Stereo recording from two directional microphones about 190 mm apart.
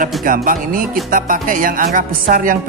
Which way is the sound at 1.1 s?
45° right (ahead or behind).